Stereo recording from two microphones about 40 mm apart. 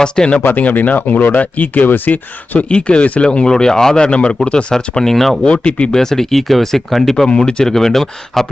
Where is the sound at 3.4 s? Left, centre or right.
Centre.